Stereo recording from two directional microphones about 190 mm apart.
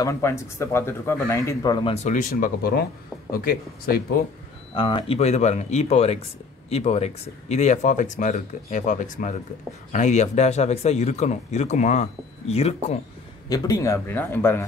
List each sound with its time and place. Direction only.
0.0 s speech: 15° left (ahead or behind)
2.0 s speech: 45° left (ahead or behind)
4.7 s speech: 25° left (ahead or behind)
13.5 s speech: 15° left (ahead or behind)